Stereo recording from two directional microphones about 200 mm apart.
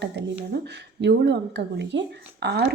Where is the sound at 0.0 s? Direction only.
60° right (ahead or behind).